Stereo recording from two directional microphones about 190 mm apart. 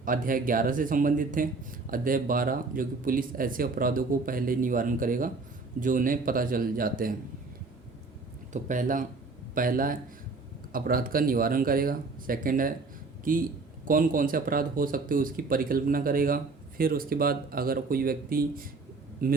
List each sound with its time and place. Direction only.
0.0 s speech: 45° right (ahead or behind)
8.5 s speech: 40° right (ahead or behind)